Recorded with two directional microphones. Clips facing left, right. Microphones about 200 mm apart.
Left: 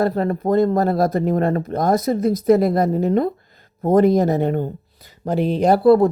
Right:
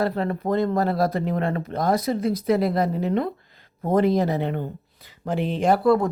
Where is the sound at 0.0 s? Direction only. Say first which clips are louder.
Left 5 dB; 45° left (ahead or behind).